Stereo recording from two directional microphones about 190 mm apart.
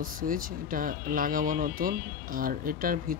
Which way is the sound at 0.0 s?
45° right (ahead or behind).